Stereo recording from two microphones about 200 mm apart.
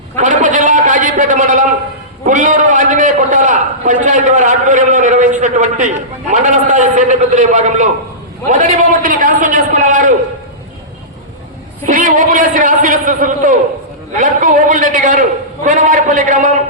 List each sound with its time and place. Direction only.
0.2 s a sound: 40° right (ahead or behind)
2.2 s a man's voice: 40° right (ahead or behind)
11.9 s a man's voice: 40° right (ahead or behind)